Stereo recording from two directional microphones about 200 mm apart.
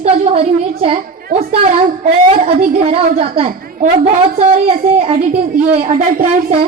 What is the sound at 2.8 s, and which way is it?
A woman's voice, 30° right (ahead or behind).